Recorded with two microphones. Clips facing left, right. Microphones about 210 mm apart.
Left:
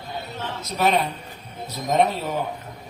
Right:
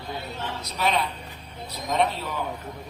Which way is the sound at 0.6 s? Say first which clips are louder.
Left 5 dB; 45° left (ahead or behind).